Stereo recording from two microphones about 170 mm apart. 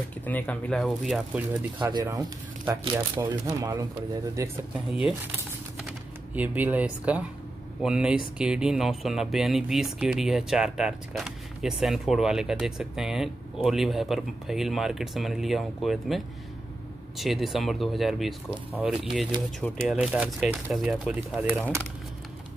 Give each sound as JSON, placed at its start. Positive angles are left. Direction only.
{"t": 0.2, "sound": "speech", "side_deg": 10}
{"t": 1.9, "sound": "speech", "side_deg": -25}
{"t": 4.8, "sound": "speech", "side_deg": -5}
{"t": 17.2, "sound": "speech", "side_deg": 0}
{"t": 19.6, "sound": "speech", "side_deg": 5}